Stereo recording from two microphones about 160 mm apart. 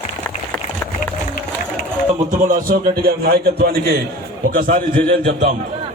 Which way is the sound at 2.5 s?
65° right (ahead or behind).